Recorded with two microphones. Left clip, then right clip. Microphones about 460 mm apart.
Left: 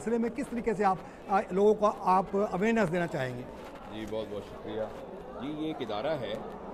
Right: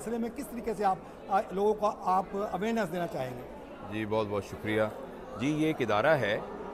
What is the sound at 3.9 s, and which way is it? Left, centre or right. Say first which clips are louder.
Speech: right 6 dB; right.